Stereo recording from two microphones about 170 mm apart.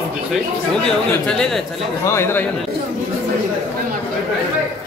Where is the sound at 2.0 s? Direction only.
15° left (ahead or behind).